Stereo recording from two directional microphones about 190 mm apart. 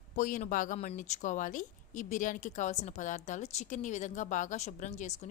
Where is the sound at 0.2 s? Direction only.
40° left (ahead or behind).